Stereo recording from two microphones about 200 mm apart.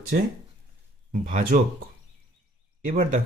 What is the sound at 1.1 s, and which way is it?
Speech, 45° right (ahead or behind).